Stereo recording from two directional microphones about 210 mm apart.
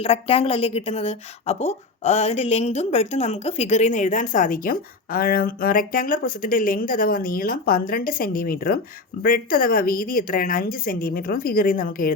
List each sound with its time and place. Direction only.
0.0 s a woman's voice: 30° left (ahead or behind)